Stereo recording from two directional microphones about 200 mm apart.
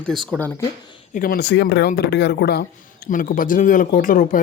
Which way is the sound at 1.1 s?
45° left (ahead or behind).